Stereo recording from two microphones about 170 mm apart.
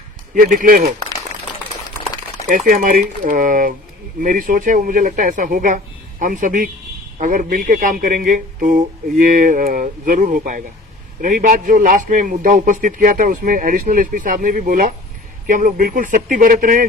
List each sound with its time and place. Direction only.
0.3 s speech: 55° right (ahead or behind)
2.5 s a man's voice: 55° right (ahead or behind)